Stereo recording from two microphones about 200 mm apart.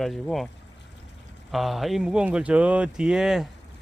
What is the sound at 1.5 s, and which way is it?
Speech, centre (ahead or behind).